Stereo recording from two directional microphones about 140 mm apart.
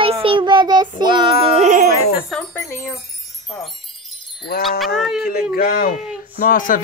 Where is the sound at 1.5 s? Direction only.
70° right (ahead or behind).